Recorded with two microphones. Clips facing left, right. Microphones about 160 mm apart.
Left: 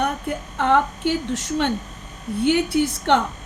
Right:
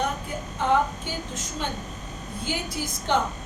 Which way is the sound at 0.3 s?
60° left (ahead or behind).